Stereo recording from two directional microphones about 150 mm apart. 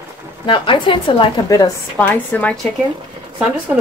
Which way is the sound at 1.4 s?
25° left (ahead or behind).